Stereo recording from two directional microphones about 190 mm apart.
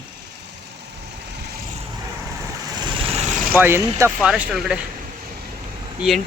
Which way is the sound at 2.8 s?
30° right (ahead or behind).